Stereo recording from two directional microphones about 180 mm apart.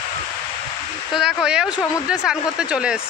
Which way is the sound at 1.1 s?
5° right (ahead or behind).